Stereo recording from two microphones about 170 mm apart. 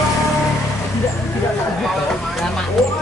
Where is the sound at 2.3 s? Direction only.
Centre (ahead or behind).